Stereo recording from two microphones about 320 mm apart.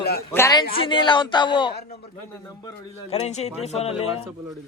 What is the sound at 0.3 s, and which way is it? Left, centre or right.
Speech, centre.